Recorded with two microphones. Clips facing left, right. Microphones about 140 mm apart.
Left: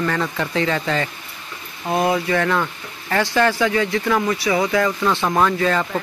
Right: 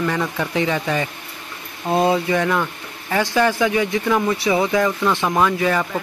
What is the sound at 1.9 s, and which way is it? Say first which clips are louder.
Speech: right 1 dB; 25° right (ahead or behind).